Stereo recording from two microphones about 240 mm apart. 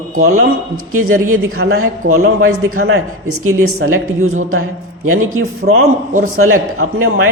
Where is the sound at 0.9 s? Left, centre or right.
Right.